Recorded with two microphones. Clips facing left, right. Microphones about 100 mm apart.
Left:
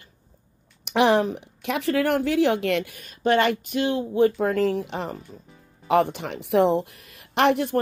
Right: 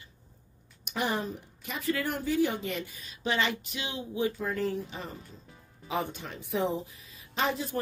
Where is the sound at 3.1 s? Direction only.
55° left (ahead or behind); by 5.1 s 90° left.